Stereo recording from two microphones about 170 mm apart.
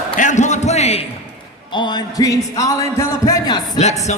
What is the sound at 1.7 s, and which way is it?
A man's voice, 25° left (ahead or behind).